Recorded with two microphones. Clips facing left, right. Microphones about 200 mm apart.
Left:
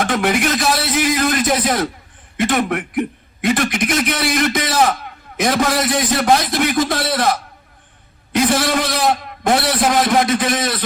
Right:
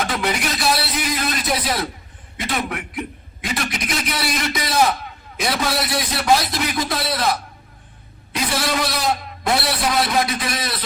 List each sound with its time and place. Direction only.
0.0 s a man's voice: 50° left (ahead or behind)
8.4 s a man's voice: 50° left (ahead or behind)